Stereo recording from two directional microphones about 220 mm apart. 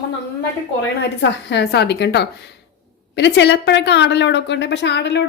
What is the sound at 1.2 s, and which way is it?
A woman's voice, 50° left (ahead or behind).